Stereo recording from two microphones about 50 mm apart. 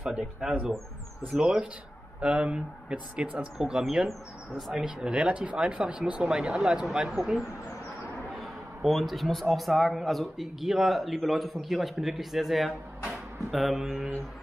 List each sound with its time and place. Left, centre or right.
0.1 s speech: centre
3.8 s a man's voice: centre
4.8 s speech: centre
6.2 s a man's voice: centre